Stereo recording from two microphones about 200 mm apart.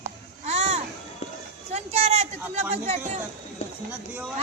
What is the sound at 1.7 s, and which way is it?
Speech, 30° right (ahead or behind).